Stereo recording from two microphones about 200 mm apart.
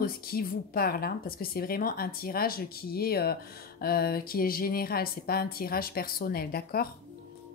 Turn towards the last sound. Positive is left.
turn(degrees=50)  # may be behind; listen again after turning